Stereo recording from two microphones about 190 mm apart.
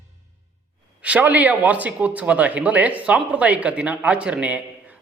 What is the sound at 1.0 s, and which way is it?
A man's voice, 10° right (ahead or behind).